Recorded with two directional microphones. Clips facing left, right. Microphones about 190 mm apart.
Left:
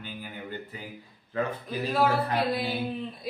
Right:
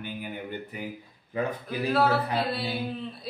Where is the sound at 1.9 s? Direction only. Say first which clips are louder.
Even; 10° left (ahead or behind).